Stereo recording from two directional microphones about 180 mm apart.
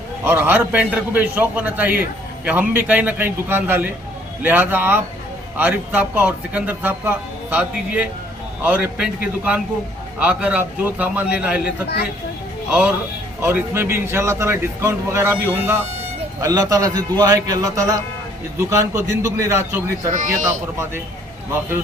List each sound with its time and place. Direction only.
0.3 s a man's voice: 10° right (ahead or behind)
10.2 s a man's voice: 10° right (ahead or behind)
13.4 s a man's voice: 10° right (ahead or behind)
20.1 s speech: 45° right (ahead or behind)